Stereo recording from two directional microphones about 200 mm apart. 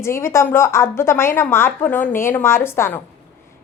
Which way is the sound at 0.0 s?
15° left (ahead or behind).